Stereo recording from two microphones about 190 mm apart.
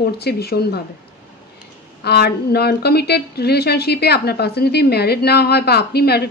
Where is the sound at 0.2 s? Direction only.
55° left (ahead or behind).